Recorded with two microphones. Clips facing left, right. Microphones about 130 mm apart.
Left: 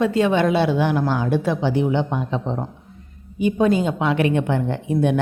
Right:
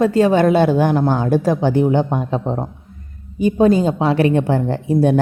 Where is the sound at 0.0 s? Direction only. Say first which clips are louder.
Right 4 dB; 40° right (ahead or behind).